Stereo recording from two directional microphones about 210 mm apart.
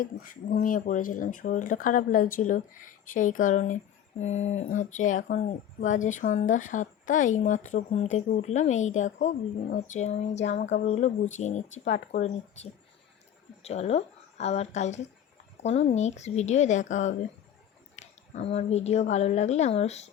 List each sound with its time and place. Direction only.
0.0 s speech: 40° left (ahead or behind)
13.6 s speech: 30° left (ahead or behind)